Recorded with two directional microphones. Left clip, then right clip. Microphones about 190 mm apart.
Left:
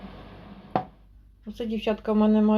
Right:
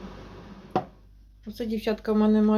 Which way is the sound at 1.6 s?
5° left (ahead or behind).